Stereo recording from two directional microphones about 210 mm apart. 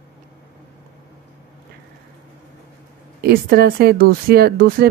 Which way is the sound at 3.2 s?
45° right (ahead or behind).